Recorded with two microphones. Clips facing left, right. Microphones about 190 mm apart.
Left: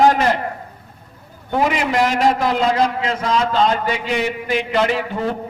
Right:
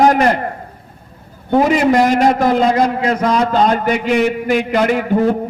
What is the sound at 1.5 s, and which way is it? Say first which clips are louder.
A man's voice: right 6 dB; 40° right (ahead or behind).